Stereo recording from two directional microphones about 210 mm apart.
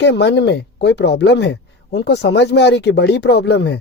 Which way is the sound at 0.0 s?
55° left (ahead or behind).